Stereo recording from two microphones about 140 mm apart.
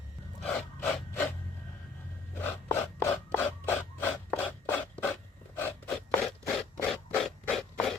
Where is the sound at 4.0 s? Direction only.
15° left (ahead or behind).